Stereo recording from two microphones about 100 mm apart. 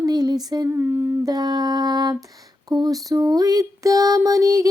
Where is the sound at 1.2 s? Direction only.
40° right (ahead or behind).